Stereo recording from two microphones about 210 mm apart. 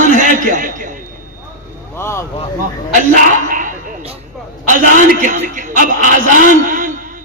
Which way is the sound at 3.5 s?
40° right (ahead or behind).